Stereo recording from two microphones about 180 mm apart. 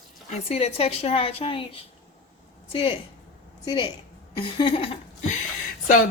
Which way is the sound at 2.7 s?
30° left (ahead or behind).